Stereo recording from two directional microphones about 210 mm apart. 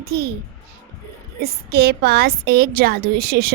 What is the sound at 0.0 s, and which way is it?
Speech, 50° right (ahead or behind).